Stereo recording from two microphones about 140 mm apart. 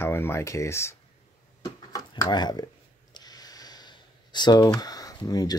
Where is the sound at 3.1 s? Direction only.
30° left (ahead or behind).